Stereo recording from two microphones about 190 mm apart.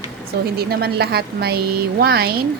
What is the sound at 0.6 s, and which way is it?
A woman's voice, 55° right (ahead or behind).